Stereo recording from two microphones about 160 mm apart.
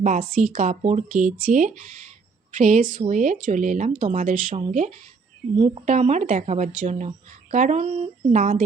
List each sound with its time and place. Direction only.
0.0 s a woman's voice: 55° right (ahead or behind)